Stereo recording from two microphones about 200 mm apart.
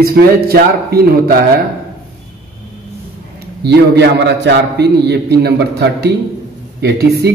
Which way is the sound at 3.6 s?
55° right (ahead or behind).